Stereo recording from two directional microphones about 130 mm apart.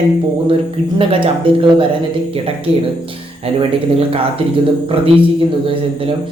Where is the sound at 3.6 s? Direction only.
45° right (ahead or behind).